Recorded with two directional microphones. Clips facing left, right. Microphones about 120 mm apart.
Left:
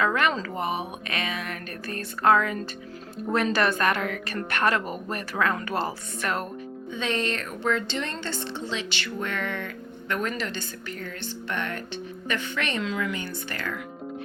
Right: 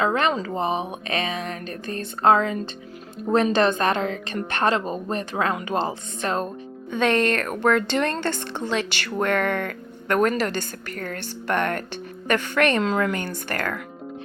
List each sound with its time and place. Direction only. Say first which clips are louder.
0.0 s speech: right 3 dB; 25° right (ahead or behind)
6.9 s a woman's voice: right 8 dB; 55° right (ahead or behind)